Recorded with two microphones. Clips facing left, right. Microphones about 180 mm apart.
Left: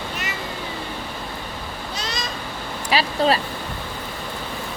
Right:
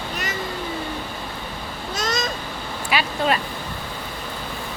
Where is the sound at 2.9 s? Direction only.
35° left (ahead or behind).